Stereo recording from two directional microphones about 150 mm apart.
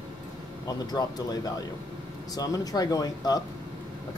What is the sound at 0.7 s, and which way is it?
Speech, 25° left (ahead or behind).